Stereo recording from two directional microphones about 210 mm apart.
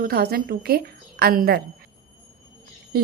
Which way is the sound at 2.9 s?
45° right (ahead or behind).